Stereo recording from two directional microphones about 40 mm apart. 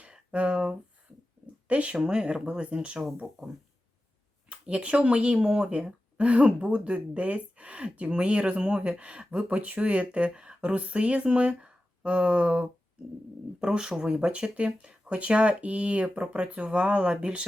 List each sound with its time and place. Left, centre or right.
0.3 s speech: right
2.2 s speech: right
4.6 s speech: right
6.1 s speech: right
13.6 s speech: centre